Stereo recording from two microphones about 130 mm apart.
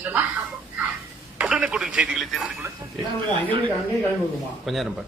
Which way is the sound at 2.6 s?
20° right (ahead or behind).